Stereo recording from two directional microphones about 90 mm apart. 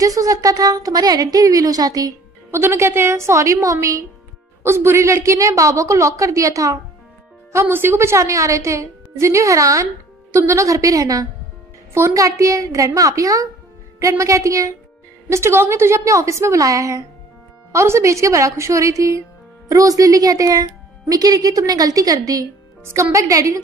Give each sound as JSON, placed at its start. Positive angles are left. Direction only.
{"t": 0.0, "sound": "a woman's voice", "side_deg": -40}
{"t": 2.5, "sound": "a woman's voice", "side_deg": -30}
{"t": 7.6, "sound": "a woman's voice", "side_deg": -25}